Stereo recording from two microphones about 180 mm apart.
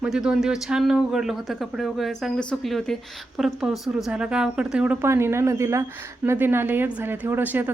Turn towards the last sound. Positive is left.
turn(degrees=-10)  # may be behind; listen again after turning